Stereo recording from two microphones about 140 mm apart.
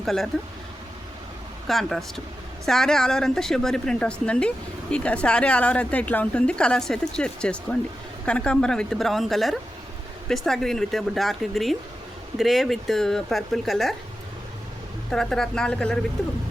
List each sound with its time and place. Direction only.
0.0 s speech: centre (ahead or behind)
1.6 s speech: centre (ahead or behind)
15.1 s speech: 5° left (ahead or behind)